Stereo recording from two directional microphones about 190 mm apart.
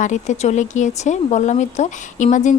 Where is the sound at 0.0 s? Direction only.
40° left (ahead or behind).